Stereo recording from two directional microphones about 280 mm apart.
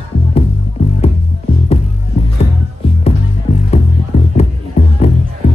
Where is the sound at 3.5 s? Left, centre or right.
Left.